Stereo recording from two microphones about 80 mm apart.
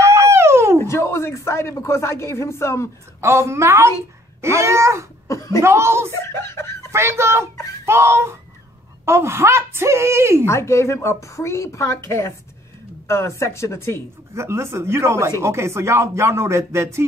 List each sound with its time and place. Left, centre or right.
0.1 s a sound: right
0.8 s speech: left
3.2 s speech: right
5.3 s speech: left
5.6 s speech: right
6.1 s speech: left
6.9 s speech: right
10.4 s a woman's voice: left
14.3 s speech: right